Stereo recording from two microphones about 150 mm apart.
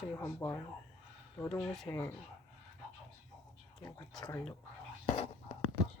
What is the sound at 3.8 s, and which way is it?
Speech, 25° left (ahead or behind).